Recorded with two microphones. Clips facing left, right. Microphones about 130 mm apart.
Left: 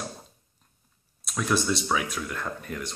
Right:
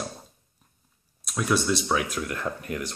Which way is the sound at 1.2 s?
Centre (ahead or behind).